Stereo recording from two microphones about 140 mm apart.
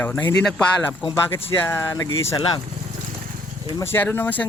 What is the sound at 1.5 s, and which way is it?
Speech, 15° left (ahead or behind).